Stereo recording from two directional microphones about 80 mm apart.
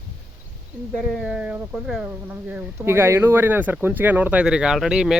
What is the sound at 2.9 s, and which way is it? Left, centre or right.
Speech, right.